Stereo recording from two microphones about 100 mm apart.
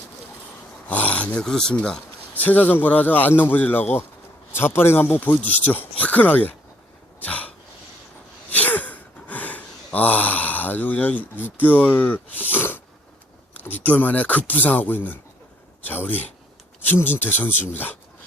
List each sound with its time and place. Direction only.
0.9 s speech: 15° left (ahead or behind)
7.2 s cough: 15° left (ahead or behind)
8.4 s gasp: 15° left (ahead or behind)
13.5 s speech: 15° left (ahead or behind)